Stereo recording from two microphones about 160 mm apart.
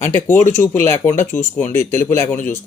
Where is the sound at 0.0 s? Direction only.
15° left (ahead or behind).